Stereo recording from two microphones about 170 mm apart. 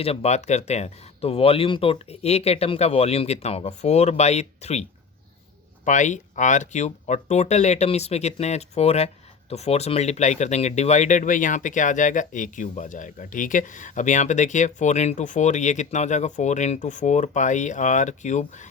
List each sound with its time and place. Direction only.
0.0 s speech: 35° left (ahead or behind)